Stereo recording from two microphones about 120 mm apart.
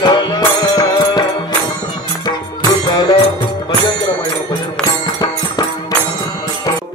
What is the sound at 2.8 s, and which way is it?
Music, 35° left (ahead or behind).